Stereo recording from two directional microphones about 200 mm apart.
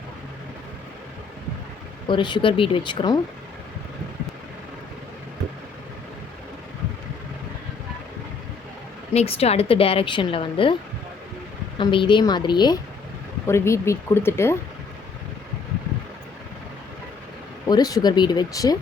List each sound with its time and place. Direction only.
2.0 s a woman's voice: 25° left (ahead or behind)
9.1 s a woman's voice: 30° left (ahead or behind)
11.8 s a woman's voice: 25° left (ahead or behind)
17.7 s a woman's voice: 20° left (ahead or behind)